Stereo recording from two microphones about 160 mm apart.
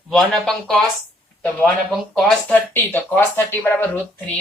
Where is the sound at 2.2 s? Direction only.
10° left (ahead or behind).